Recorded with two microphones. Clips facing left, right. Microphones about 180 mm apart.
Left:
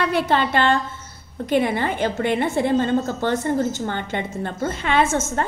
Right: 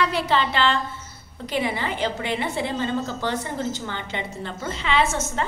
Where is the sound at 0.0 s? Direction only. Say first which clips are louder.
Left 2 dB; 50° left (ahead or behind).